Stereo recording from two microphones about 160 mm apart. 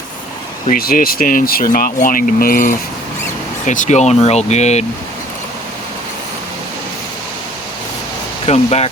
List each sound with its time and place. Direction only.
0.7 s speech: 60° left (ahead or behind)
3.7 s speech: 50° left (ahead or behind)
8.4 s speech: 40° left (ahead or behind)